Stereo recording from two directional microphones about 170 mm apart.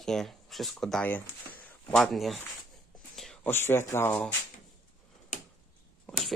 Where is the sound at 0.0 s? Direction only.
Centre (ahead or behind).